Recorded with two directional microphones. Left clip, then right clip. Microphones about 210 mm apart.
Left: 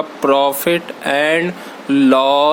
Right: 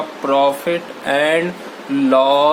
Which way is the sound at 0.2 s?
50° left (ahead or behind).